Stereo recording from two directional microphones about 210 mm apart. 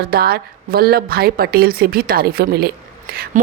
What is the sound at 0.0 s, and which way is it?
A woman's voice, 45° right (ahead or behind).